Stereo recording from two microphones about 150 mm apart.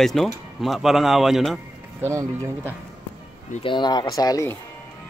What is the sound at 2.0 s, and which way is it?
Speech, 15° right (ahead or behind).